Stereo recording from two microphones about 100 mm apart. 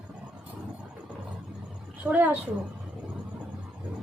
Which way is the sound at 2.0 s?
15° right (ahead or behind).